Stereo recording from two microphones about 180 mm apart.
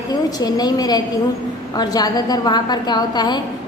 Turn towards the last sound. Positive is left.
turn(degrees=25)  # may be behind; listen again after turning